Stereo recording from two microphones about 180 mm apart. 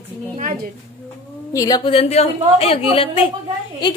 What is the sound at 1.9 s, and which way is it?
A woman's voice, 35° left (ahead or behind).